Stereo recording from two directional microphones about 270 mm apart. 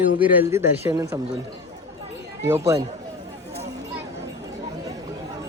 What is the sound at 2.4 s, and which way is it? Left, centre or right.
Speech, centre.